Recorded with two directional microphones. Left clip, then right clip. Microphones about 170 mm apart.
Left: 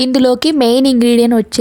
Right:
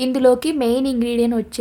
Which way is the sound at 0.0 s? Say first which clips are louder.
Left 4 dB; 45° left (ahead or behind).